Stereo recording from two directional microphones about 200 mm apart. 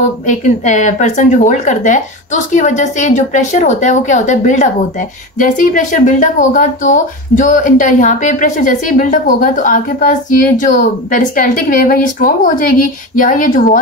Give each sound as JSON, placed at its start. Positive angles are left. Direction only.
{"t": 0.3, "sound": "speech", "side_deg": 35}